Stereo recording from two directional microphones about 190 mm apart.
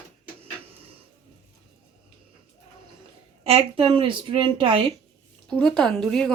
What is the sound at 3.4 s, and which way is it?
A woman's voice, 30° right (ahead or behind).